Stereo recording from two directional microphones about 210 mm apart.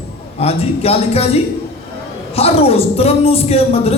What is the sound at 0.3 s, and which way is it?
A woman's voice, 30° left (ahead or behind).